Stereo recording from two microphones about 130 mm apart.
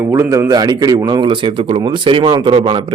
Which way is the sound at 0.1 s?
25° right (ahead or behind).